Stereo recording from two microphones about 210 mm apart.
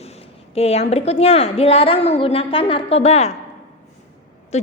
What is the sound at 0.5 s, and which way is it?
A woman's voice, 30° left (ahead or behind).